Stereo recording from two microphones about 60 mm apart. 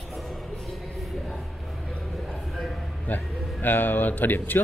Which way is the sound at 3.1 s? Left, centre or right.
Left.